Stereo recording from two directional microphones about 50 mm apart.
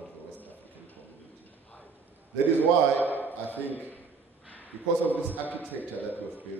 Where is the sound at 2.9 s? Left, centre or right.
Left.